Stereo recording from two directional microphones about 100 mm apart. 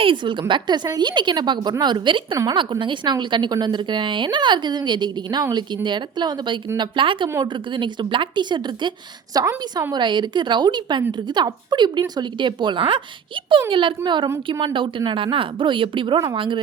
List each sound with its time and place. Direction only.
0.0 s a woman's voice: 55° right (ahead or behind)
9.3 s a woman's voice: 40° right (ahead or behind)
9.9 s a woman's voice: 50° right (ahead or behind)